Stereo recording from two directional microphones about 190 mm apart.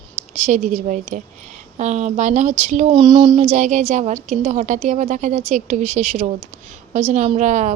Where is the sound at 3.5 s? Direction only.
40° right (ahead or behind).